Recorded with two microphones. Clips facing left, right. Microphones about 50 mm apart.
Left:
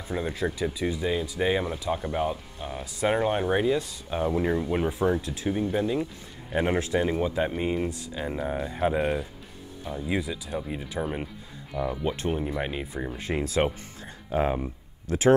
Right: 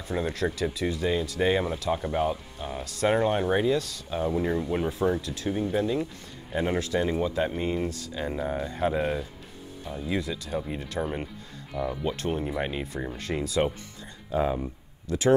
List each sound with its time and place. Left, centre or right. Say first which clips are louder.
0.1 s speech: right 1 dB; centre
2.8 s speech: right 1 dB; centre
6.5 s speech: left 2 dB; centre
12.3 s speech: even; centre
13.4 s speech: left 1 dB; left
14.0 s a sound: left 1 dB; left